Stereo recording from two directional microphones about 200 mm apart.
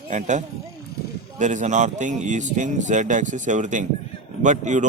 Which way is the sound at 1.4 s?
35° right (ahead or behind).